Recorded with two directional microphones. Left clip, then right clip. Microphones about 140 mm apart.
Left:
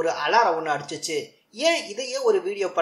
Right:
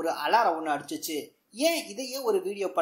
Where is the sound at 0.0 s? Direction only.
40° right (ahead or behind).